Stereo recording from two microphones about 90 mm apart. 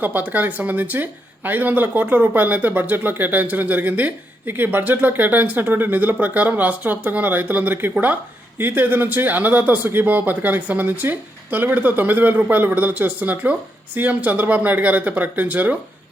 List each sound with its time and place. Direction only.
0.0 s speech: 20° right (ahead or behind)